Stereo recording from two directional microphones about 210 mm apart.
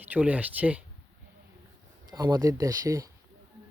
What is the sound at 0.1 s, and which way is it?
Speech, 5° right (ahead or behind).